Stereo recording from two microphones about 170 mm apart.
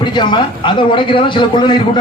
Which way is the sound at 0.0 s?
25° left (ahead or behind).